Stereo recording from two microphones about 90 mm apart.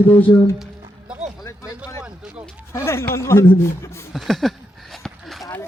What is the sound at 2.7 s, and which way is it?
Speech, 30° left (ahead or behind).